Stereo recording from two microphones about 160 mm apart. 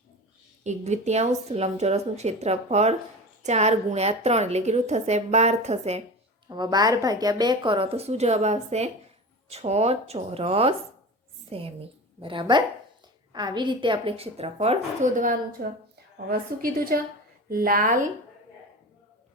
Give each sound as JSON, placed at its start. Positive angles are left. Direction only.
{"t": 0.6, "sound": "a woman's voice", "side_deg": -45}
{"t": 6.5, "sound": "a woman's voice", "side_deg": -25}
{"t": 15.6, "sound": "a woman's voice", "side_deg": -75}
{"t": 16.1, "sound": "a woman's voice", "side_deg": -65}